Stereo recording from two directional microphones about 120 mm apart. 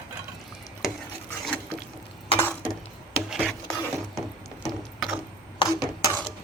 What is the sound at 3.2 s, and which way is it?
Rub, centre (ahead or behind).